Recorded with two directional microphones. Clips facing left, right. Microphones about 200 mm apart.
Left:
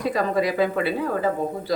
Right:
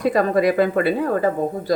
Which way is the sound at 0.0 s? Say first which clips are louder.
Right 5 dB; 55° right (ahead or behind).